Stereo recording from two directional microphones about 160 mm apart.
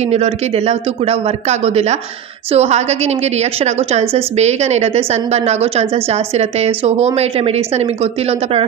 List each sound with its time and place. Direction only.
0.0 s a woman's voice: 40° right (ahead or behind)